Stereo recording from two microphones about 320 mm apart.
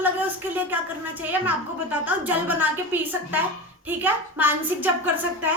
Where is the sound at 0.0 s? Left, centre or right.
Centre.